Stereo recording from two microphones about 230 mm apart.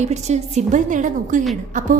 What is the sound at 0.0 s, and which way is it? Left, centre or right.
A woman's voice, right.